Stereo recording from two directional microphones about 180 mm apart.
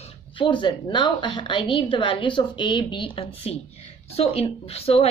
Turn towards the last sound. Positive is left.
turn(degrees=35)  # may be behind; listen again after turning